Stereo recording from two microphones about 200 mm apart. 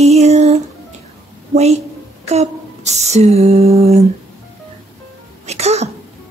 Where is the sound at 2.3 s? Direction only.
35° right (ahead or behind).